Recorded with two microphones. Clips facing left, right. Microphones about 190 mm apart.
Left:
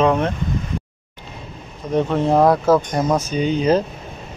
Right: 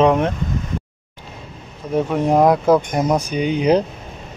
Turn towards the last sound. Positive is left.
turn(degrees=-15)  # may be behind; listen again after turning